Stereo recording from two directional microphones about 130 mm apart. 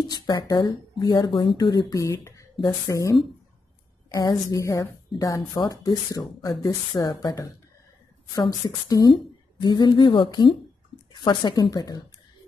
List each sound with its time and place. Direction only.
0.1 s a woman's voice: 30° left (ahead or behind)